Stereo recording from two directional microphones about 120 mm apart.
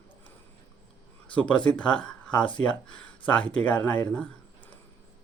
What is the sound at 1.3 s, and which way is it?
Speech, 10° left (ahead or behind).